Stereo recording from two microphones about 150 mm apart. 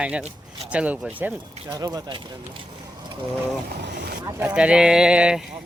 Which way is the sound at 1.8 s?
25° right (ahead or behind).